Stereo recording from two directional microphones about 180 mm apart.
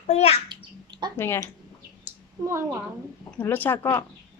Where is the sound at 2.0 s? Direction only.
15° right (ahead or behind).